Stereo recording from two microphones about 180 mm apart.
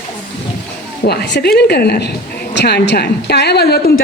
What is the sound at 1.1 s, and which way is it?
A woman's voice, 65° left (ahead or behind).